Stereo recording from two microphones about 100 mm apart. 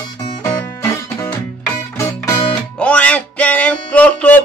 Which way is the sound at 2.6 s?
10° left (ahead or behind).